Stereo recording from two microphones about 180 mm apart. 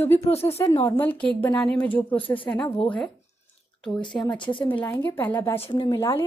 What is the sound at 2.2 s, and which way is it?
Speech, 30° left (ahead or behind).